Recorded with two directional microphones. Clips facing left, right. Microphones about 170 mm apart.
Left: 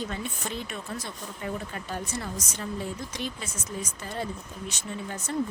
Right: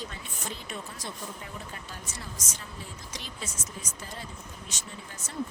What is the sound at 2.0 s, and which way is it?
Speech, 60° left (ahead or behind).